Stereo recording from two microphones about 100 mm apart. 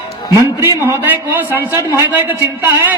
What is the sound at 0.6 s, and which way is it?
A man's voice, 25° right (ahead or behind).